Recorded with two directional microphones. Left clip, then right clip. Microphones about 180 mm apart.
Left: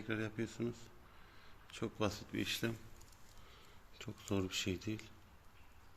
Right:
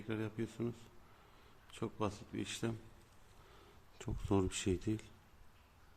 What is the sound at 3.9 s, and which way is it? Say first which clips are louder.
Speech: right 4 dB; 40° right (ahead or behind).